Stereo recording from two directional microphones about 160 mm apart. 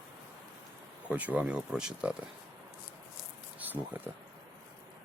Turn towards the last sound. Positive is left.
turn(degrees=-10)  # may be behind; listen again after turning